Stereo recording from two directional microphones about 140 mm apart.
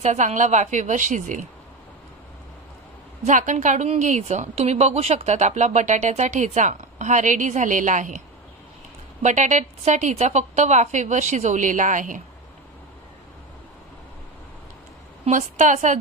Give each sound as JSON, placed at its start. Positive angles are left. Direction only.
{"t": 0.0, "sound": "a woman's voice", "side_deg": -60}
{"t": 3.3, "sound": "a woman's voice", "side_deg": -60}
{"t": 9.2, "sound": "a woman's voice", "side_deg": -60}
{"t": 15.2, "sound": "a woman's voice", "side_deg": -60}